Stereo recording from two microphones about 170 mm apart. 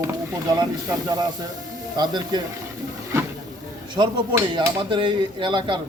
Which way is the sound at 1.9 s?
25° right (ahead or behind).